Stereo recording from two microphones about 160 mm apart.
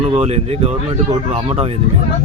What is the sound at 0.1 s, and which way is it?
Speech, 35° right (ahead or behind).